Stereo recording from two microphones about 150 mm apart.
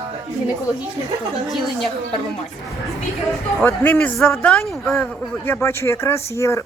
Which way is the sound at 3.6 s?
10° left (ahead or behind).